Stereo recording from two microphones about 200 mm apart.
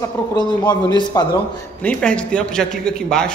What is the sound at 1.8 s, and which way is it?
A man's voice, 5° left (ahead or behind).